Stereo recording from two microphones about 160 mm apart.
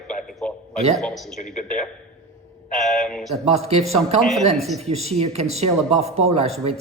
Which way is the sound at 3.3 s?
40° right (ahead or behind).